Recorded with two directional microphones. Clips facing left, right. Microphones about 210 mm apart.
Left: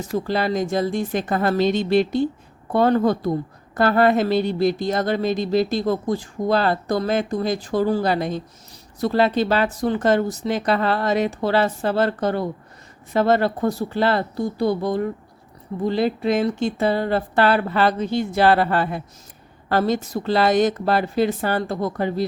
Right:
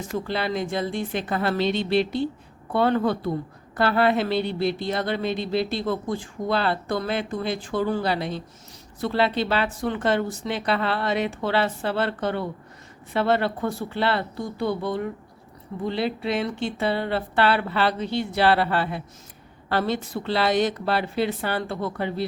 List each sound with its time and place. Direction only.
0.3 s speech: 40° left (ahead or behind)